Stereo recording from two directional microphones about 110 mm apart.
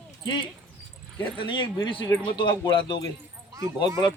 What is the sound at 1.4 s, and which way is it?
Speech, 45° left (ahead or behind).